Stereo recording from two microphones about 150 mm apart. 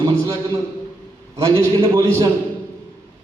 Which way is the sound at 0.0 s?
20° right (ahead or behind).